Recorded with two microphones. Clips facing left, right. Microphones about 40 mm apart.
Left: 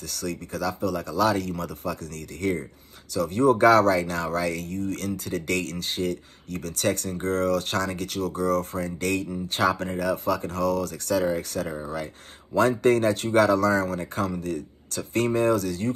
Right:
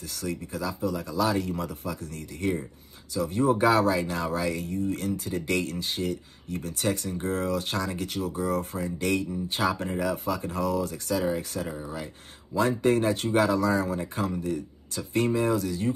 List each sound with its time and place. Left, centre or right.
0.2 s speech: left
9.1 s speech: left